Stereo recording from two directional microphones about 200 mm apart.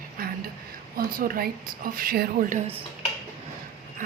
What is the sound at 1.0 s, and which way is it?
A woman's voice, 45° right (ahead or behind).